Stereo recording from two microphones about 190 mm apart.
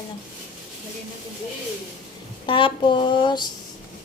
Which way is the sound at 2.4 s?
25° left (ahead or behind).